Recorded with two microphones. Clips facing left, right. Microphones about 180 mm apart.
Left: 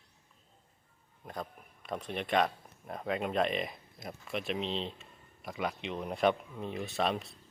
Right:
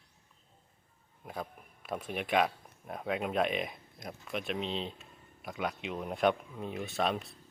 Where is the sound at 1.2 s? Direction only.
5° right (ahead or behind).